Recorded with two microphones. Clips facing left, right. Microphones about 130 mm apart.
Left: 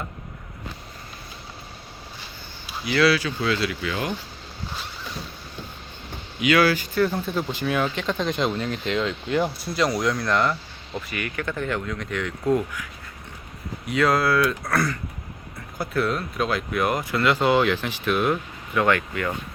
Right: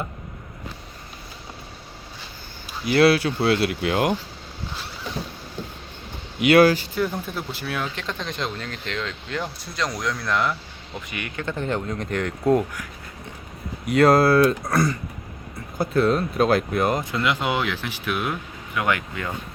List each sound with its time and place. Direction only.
2.6 s speech: 50° right (ahead or behind)
6.4 s speech: 55° right (ahead or behind)
7.0 s speech: 15° right (ahead or behind)
7.3 s speech: 5° right (ahead or behind)
11.1 s speech: 25° right (ahead or behind); by 12.8 s 40° right (ahead or behind)
13.9 s speech: 35° right (ahead or behind)
14.6 s speech: 15° right (ahead or behind)